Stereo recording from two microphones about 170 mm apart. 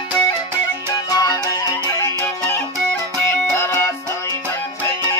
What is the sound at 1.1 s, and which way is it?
Music, 20° left (ahead or behind).